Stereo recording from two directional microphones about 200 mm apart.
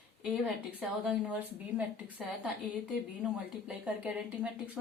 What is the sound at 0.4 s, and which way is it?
Speech, 5° right (ahead or behind).